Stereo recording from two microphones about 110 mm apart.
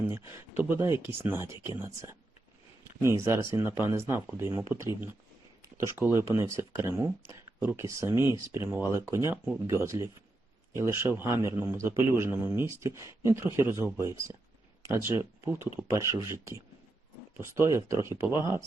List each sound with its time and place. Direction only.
0.1 s a man's voice: 20° right (ahead or behind)
14.8 s a man's voice: 25° right (ahead or behind)